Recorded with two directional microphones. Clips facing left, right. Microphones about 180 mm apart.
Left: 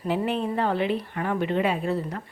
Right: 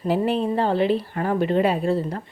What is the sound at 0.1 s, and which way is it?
A woman's voice, 35° right (ahead or behind).